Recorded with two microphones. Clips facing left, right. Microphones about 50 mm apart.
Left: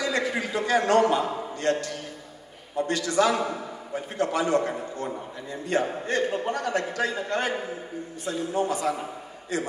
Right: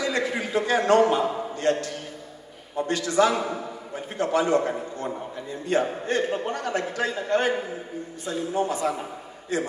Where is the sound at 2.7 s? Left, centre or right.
Right.